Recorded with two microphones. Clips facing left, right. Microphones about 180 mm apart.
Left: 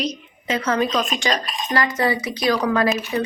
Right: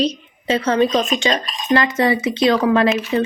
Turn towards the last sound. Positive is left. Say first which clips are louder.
# right 4 dB
turn(degrees=-25)  # may be behind; listen again after turning